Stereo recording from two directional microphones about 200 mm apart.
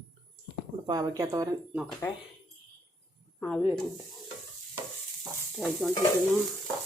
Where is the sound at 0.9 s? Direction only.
20° right (ahead or behind).